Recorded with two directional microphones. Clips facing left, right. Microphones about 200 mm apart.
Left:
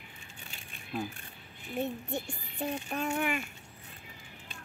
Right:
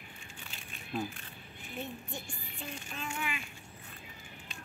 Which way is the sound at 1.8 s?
65° left (ahead or behind).